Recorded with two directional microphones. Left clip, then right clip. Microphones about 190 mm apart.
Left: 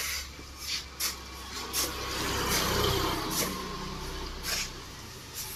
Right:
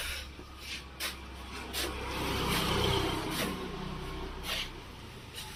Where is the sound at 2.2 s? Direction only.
55° right (ahead or behind).